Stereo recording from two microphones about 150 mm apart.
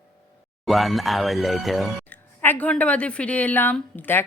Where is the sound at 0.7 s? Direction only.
Centre (ahead or behind).